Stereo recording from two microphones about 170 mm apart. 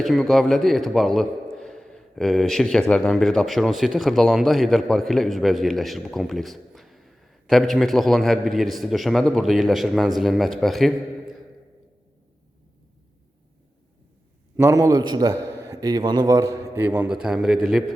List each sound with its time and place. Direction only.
0.0 s a man's voice: centre (ahead or behind)
14.5 s a man's voice: 20° right (ahead or behind); by 17.8 s centre (ahead or behind)